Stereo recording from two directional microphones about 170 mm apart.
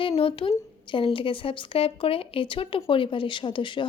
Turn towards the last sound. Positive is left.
turn(degrees=30)  # may be behind; listen again after turning